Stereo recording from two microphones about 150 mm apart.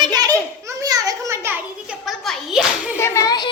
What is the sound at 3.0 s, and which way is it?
Speech, 20° left (ahead or behind).